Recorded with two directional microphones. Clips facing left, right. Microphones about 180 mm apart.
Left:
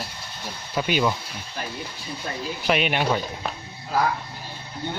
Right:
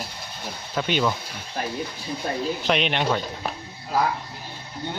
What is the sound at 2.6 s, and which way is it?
Speech, 5° left (ahead or behind).